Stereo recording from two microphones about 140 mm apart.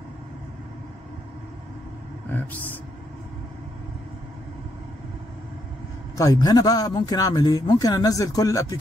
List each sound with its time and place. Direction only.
2.3 s speech: 15° left (ahead or behind)
6.1 s a man's voice: 25° left (ahead or behind)